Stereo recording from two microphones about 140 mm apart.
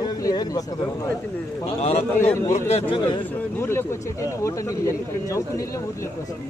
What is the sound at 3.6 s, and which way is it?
Speech, 20° left (ahead or behind).